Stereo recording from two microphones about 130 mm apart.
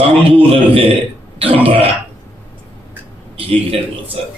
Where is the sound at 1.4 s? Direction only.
45° right (ahead or behind).